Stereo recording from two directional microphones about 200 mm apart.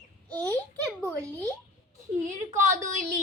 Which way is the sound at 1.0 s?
15° right (ahead or behind).